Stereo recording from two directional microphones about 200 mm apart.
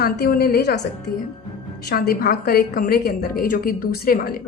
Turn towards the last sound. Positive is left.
turn(degrees=45)  # may be behind; listen again after turning